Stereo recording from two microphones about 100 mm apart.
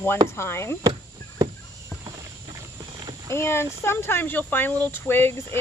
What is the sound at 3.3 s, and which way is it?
Speech, 25° left (ahead or behind).